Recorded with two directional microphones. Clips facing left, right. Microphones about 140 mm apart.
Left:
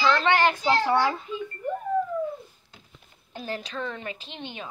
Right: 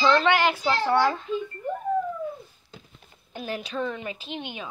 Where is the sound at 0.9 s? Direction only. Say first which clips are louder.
Right 1 dB; 5° left (ahead or behind).